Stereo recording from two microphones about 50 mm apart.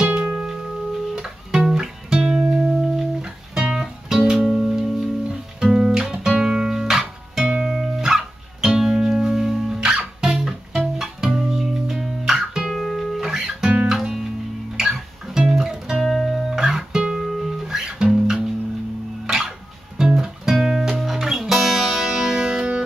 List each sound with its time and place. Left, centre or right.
0.0 s music: right
5.6 s guitar: centre
7.4 s music: centre
9.8 s music: centre
12.7 s guitar: centre
13.3 s guitar: centre
13.7 s guitar: centre
14.8 s music: centre
16.1 s music: centre
17.6 s music: centre